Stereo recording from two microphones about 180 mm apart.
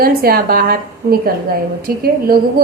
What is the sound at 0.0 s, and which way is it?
A woman's voice, 55° right (ahead or behind).